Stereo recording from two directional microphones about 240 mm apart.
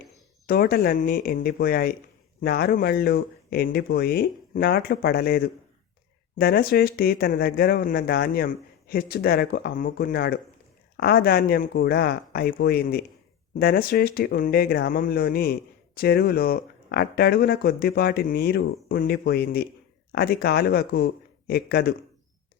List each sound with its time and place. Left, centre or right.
0.4 s speech: left